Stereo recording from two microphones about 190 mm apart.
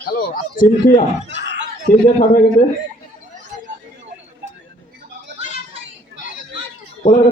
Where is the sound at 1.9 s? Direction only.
45° left (ahead or behind).